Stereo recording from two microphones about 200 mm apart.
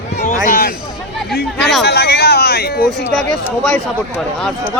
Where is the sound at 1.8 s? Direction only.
55° left (ahead or behind).